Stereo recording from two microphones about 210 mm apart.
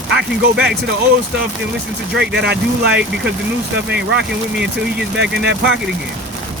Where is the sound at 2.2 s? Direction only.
55° right (ahead or behind).